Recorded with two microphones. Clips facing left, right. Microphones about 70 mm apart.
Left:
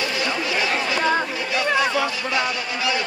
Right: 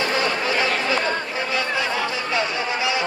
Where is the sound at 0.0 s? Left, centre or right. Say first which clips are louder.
Right 2 dB; right.